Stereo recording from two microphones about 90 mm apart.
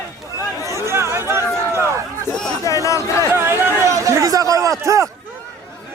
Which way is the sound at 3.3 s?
25° right (ahead or behind).